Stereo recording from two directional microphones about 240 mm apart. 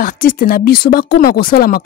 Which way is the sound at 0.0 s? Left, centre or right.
Left.